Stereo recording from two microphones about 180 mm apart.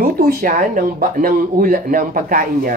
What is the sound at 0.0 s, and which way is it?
Speech, 55° right (ahead or behind).